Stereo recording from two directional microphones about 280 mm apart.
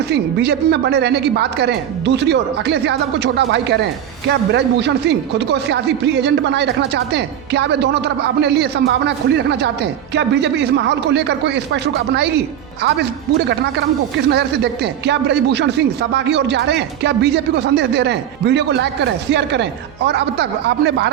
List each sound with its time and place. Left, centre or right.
0.1 s speech: right
14.3 s speech: right
20.1 s speech: right